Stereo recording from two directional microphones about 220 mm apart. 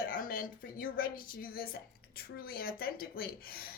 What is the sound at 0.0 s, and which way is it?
A woman's voice, 40° left (ahead or behind).